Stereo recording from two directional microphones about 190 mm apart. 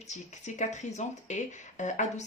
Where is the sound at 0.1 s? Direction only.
40° left (ahead or behind).